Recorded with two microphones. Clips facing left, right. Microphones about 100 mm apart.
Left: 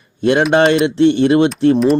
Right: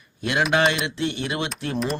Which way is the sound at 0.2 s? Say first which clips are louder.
Left 9 dB; 35° left (ahead or behind).